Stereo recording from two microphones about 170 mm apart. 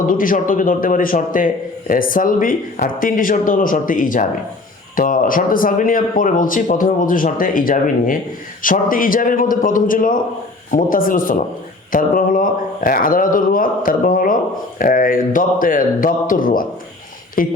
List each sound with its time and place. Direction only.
0.1 s a man's voice: 55° left (ahead or behind)